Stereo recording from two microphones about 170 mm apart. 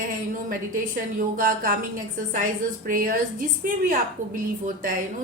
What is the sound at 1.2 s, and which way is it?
A woman's voice, 55° right (ahead or behind).